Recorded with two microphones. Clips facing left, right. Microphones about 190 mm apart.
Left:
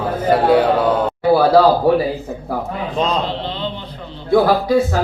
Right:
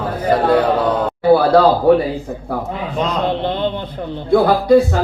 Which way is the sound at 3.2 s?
55° right (ahead or behind).